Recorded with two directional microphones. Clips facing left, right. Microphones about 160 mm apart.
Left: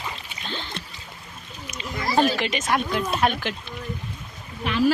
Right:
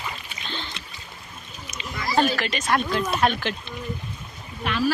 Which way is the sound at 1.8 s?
30° left (ahead or behind).